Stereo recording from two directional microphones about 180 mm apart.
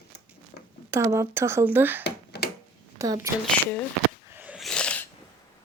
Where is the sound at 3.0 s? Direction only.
15° right (ahead or behind).